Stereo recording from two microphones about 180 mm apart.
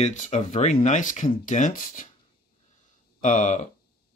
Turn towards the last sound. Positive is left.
turn(degrees=40)  # may be behind; listen again after turning